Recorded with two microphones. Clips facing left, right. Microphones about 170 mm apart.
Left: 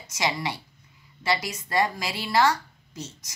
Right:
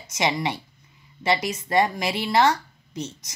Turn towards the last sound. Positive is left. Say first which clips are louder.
# right 6 dB
turn(degrees=-20)  # may be behind; listen again after turning